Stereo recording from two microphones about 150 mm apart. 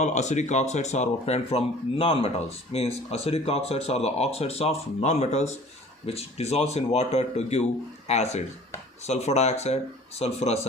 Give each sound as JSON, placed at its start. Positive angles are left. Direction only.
{"t": 0.0, "sound": "speech", "side_deg": 50}